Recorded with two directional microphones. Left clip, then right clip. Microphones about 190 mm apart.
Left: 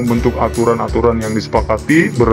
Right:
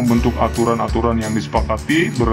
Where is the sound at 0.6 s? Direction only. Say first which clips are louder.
Left 4 dB; 25° left (ahead or behind).